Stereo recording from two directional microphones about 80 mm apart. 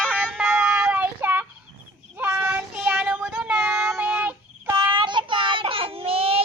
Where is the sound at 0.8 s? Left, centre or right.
Right.